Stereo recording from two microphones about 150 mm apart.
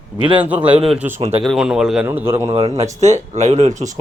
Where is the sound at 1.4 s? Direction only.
Centre (ahead or behind).